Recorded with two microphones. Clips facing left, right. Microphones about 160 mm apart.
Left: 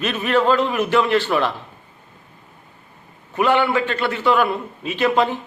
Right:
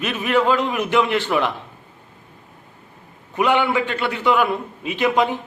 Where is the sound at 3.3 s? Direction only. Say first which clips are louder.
Left 1 dB; 15° right (ahead or behind).